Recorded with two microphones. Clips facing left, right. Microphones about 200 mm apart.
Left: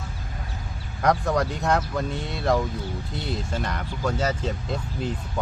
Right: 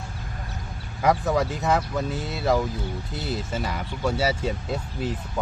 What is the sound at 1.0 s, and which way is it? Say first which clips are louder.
Speech: right 1 dB; 5° right (ahead or behind).